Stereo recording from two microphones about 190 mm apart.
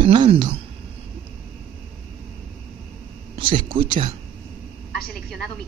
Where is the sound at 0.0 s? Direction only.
25° right (ahead or behind).